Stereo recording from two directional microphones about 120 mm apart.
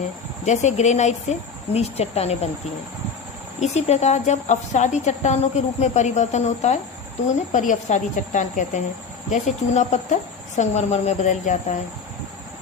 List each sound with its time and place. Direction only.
0.4 s a woman's voice: 75° left (ahead or behind)
3.6 s a woman's voice: 65° left (ahead or behind)
7.5 s speech: 90° left
9.3 s speech: 75° left (ahead or behind)